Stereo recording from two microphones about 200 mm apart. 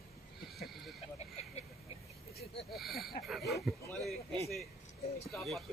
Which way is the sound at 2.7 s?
Centre (ahead or behind).